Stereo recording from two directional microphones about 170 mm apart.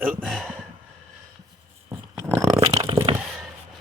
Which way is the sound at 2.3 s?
15° right (ahead or behind).